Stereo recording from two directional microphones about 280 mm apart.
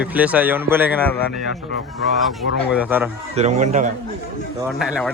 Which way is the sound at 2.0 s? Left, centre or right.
Centre.